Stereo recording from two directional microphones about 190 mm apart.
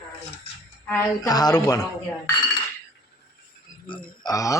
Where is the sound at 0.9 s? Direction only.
15° left (ahead or behind).